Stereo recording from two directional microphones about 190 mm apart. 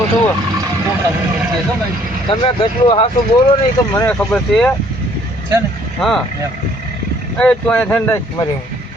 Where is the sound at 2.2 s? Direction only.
25° left (ahead or behind).